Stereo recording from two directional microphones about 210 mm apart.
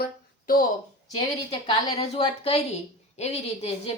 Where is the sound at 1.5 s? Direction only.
25° left (ahead or behind).